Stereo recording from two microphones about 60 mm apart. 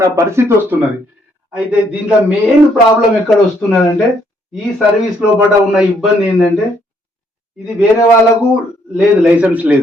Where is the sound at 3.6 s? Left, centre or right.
Left.